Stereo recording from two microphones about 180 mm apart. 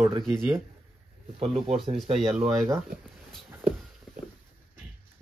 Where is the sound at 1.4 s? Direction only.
35° right (ahead or behind).